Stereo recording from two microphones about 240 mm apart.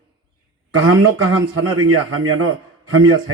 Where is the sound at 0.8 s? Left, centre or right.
Right.